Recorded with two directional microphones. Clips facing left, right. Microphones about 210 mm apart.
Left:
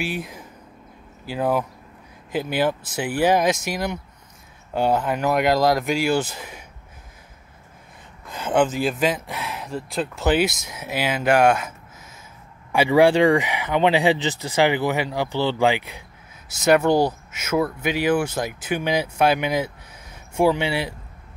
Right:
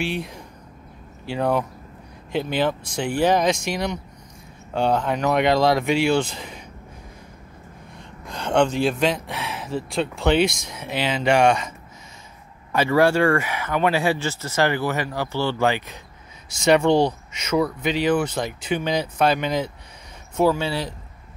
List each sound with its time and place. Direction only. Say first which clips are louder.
0.0 s speech: right 1 dB; centre (ahead or behind)
8.3 s speech: even; 5° left (ahead or behind)
12.7 s speech: left 2 dB; 15° left (ahead or behind)